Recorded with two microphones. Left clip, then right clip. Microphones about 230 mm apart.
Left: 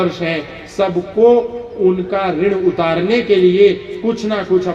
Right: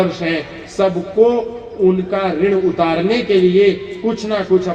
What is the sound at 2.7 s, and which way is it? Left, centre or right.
Speech, left.